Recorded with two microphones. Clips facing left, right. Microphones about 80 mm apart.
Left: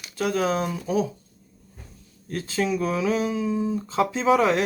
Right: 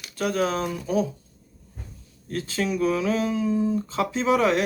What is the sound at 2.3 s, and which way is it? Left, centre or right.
Speech, left.